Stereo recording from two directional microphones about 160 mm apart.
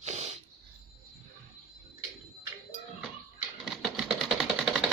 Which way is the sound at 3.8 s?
Centre (ahead or behind).